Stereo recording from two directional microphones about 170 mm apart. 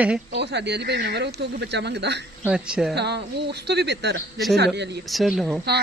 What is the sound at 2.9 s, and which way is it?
Speech, 80° right.